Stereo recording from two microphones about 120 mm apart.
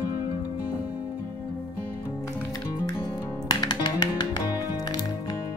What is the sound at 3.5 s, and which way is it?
Music, 35° left (ahead or behind).